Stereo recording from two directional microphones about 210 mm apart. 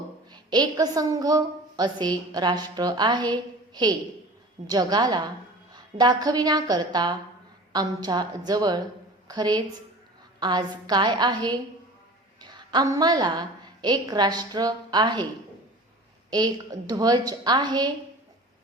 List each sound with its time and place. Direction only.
0.3 s a woman's voice: 20° right (ahead or behind)
4.6 s a woman's voice: 20° right (ahead or behind)
16.3 s a woman's voice: 20° right (ahead or behind)